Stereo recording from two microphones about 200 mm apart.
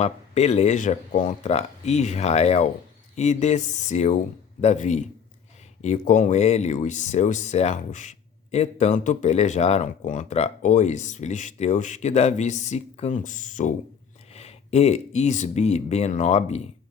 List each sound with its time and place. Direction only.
0.0 s speech: 35° left (ahead or behind)